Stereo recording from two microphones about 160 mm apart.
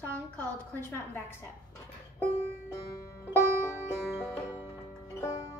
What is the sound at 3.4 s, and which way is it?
Music, 15° right (ahead or behind).